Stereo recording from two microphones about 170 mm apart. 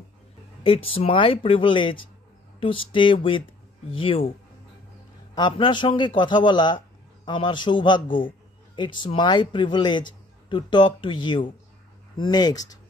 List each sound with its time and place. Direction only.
0.7 s speech: 35° left (ahead or behind)
5.3 s a man's voice: 25° left (ahead or behind)